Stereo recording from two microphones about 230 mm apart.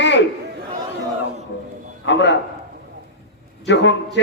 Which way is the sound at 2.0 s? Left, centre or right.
Left.